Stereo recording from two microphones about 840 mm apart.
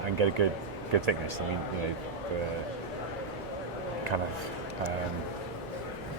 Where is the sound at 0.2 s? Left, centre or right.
Right.